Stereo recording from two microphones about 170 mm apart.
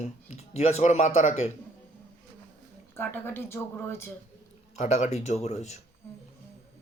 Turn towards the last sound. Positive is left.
turn(degrees=40)  # may be behind; listen again after turning